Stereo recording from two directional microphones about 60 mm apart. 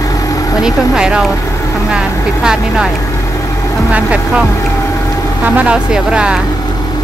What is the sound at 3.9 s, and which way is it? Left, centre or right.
Speech, right.